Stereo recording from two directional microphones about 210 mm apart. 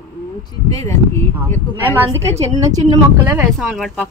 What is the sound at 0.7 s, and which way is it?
Speech, 15° left (ahead or behind).